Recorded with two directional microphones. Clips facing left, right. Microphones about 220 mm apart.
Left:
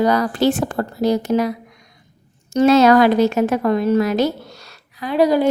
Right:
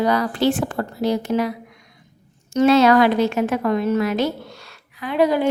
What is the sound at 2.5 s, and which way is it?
A woman's voice, 40° left (ahead or behind).